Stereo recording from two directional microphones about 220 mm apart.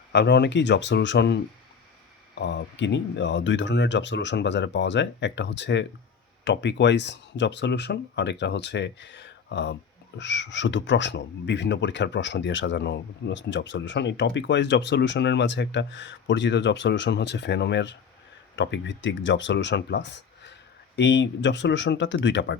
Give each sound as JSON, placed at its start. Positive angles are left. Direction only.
{"t": 0.1, "sound": "speech", "side_deg": 50}